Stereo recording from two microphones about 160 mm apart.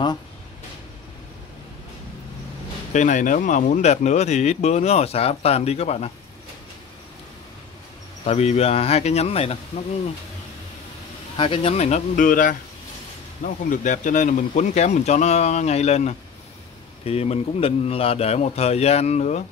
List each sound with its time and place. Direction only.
2.9 s speech: 50° left (ahead or behind)
8.3 s a man's voice: 40° left (ahead or behind)
11.3 s a man's voice: 35° left (ahead or behind)